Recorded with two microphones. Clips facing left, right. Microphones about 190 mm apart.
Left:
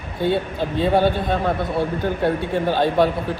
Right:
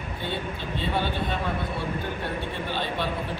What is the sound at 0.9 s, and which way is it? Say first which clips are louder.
Speech: left 9 dB; 45° left (ahead or behind).